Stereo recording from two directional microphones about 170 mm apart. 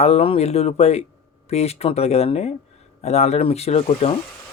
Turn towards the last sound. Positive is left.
turn(degrees=35)  # may be behind; listen again after turning